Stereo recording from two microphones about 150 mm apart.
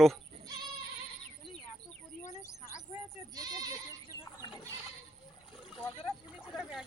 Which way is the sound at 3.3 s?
25° right (ahead or behind).